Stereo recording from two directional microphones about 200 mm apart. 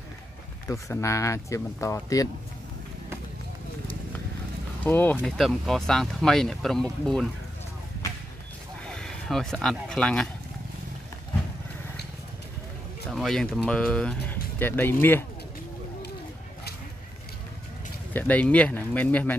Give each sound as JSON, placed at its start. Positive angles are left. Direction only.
{"t": 0.7, "sound": "speech", "side_deg": 15}
{"t": 4.8, "sound": "speech", "side_deg": 10}
{"t": 8.8, "sound": "speech", "side_deg": 5}
{"t": 13.1, "sound": "speech", "side_deg": 0}
{"t": 18.1, "sound": "speech", "side_deg": 10}